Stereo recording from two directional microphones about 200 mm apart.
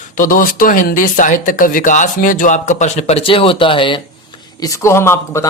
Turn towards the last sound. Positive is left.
turn(degrees=15)  # may be behind; listen again after turning